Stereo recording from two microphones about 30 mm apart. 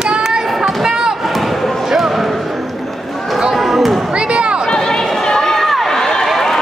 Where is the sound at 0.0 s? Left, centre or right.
Right.